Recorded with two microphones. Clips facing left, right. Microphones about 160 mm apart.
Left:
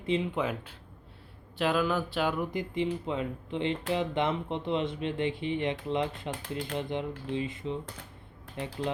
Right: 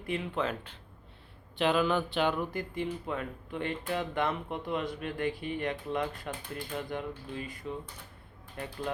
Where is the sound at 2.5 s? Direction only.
20° left (ahead or behind).